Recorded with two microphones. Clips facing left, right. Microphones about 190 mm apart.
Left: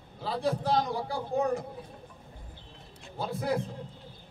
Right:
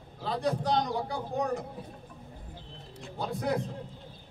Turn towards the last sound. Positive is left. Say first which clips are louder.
# even
turn(degrees=0)  # may be behind; listen again after turning